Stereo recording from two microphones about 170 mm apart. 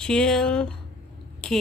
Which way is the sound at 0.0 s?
5° left (ahead or behind).